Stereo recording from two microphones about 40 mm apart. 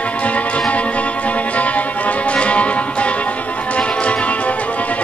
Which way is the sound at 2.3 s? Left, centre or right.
Left.